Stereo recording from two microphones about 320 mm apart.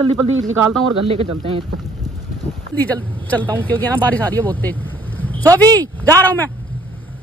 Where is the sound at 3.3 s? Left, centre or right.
Centre.